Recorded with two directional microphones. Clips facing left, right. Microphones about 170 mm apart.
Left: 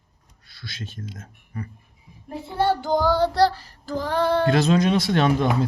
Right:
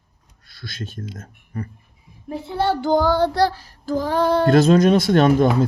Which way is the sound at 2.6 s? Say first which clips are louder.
Right 2 dB; 65° right (ahead or behind).